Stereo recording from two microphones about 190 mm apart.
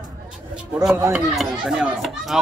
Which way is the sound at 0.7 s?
5° right (ahead or behind).